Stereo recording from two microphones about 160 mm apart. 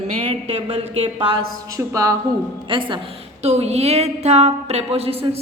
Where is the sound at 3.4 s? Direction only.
40° right (ahead or behind).